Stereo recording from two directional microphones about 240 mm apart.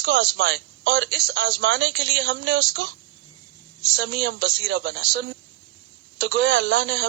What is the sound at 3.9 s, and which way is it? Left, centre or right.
Speech, right.